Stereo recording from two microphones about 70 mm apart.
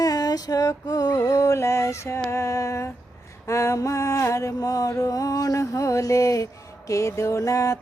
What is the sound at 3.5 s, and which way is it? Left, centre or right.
Mantra, left.